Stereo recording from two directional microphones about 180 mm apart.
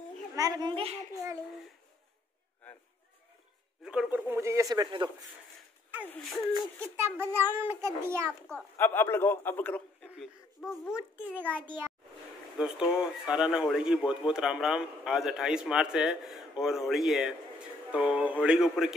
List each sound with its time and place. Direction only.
0.4 s a child's voice: 20° right (ahead or behind)
3.8 s a child's voice: 5° right (ahead or behind); by 5.1 s 25° right (ahead or behind)
6.0 s speech: 5° left (ahead or behind)
7.0 s a child's voice: 10° right (ahead or behind)
8.3 s speech: 5° left (ahead or behind)
10.1 s a sound: centre (ahead or behind)
11.0 s a child's voice: 10° right (ahead or behind)
12.5 s speech: 5° right (ahead or behind)